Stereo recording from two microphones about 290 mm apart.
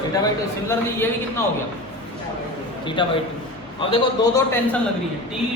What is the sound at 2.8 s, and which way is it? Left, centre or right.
Speech, centre.